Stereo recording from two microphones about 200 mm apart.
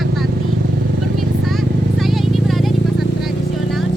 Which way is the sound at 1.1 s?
Centre (ahead or behind).